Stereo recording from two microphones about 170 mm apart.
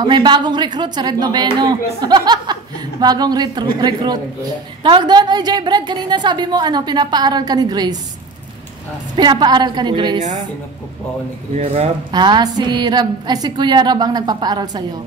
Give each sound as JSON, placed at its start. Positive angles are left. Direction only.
{"t": 0.0, "sound": "speech", "side_deg": -25}
{"t": 9.1, "sound": "speech", "side_deg": -25}
{"t": 11.5, "sound": "speech", "side_deg": -40}
{"t": 12.1, "sound": "speech", "side_deg": -25}